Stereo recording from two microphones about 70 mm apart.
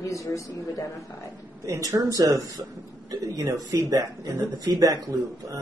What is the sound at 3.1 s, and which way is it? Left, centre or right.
Speech, right.